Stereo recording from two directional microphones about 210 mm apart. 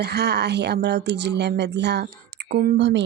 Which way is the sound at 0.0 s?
50° right (ahead or behind).